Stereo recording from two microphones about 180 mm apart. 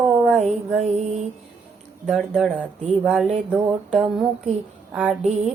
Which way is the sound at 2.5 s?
10° right (ahead or behind).